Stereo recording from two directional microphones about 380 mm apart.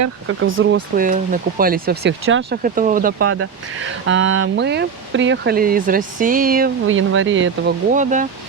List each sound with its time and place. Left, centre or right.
0.3 s speech: right
3.2 s speech: right